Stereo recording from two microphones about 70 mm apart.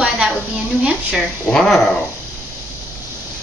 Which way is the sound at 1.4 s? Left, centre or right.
Centre.